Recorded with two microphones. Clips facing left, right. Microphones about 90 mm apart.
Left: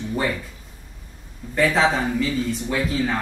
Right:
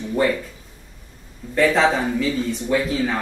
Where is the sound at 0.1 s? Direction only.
Centre (ahead or behind).